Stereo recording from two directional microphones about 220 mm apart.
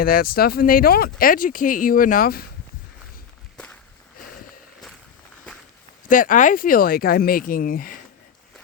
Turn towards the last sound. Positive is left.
turn(degrees=40)  # may be behind; listen again after turning